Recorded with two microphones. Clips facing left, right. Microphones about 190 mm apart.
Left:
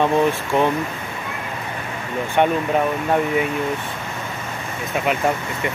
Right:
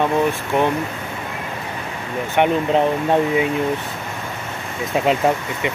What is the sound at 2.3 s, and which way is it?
Speech, 20° right (ahead or behind).